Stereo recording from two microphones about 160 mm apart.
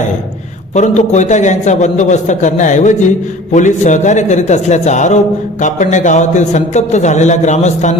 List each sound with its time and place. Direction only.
0.7 s speech: 50° left (ahead or behind)